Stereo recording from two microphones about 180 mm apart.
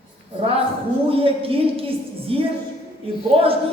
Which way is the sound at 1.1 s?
30° right (ahead or behind).